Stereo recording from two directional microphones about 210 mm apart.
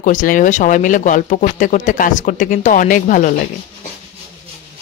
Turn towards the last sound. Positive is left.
turn(degrees=40)  # may be behind; listen again after turning